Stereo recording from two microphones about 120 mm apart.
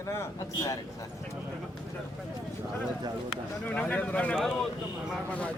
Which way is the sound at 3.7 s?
10° left (ahead or behind).